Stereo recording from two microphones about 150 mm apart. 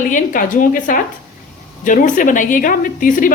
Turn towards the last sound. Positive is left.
turn(degrees=65)  # may be behind; listen again after turning